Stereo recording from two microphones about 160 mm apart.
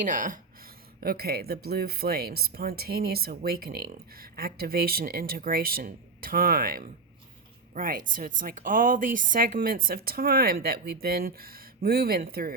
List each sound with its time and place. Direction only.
0.0 s speech: 55° right (ahead or behind)
1.0 s a woman's voice: 75° right (ahead or behind)